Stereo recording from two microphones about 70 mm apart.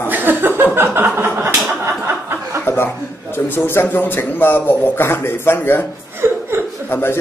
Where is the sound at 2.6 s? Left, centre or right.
Left.